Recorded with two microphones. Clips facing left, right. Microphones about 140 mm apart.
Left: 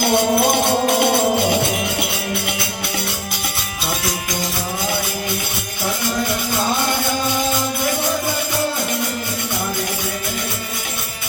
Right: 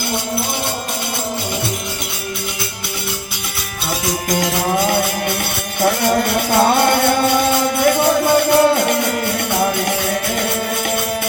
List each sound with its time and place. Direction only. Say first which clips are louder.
5.8 s music: right 7 dB; 60° right (ahead or behind)